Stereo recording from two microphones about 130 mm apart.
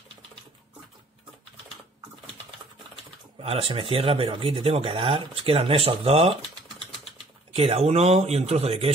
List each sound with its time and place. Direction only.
3.3 s speech: 45° right (ahead or behind)
7.5 s speech: 50° right (ahead or behind)